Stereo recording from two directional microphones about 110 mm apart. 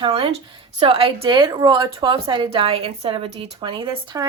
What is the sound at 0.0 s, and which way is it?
A woman's voice, 60° right (ahead or behind).